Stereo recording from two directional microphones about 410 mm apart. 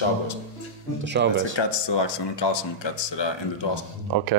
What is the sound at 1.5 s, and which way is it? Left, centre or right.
Speech, left.